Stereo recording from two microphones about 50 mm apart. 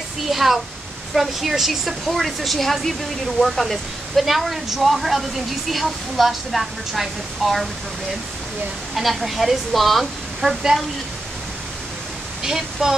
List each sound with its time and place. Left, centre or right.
0.3 s speech: centre
8.9 s speech: centre
12.4 s speech: centre